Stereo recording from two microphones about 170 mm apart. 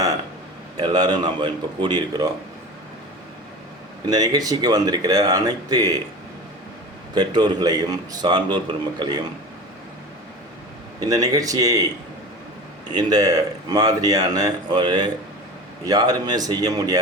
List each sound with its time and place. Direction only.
0.8 s speech: 25° right (ahead or behind)
4.0 s speech: 25° right (ahead or behind)
7.1 s speech: 25° right (ahead or behind)
11.0 s speech: 20° right (ahead or behind)
12.9 s speech: 25° right (ahead or behind)